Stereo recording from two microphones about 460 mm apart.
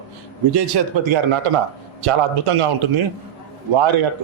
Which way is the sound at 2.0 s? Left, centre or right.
Right.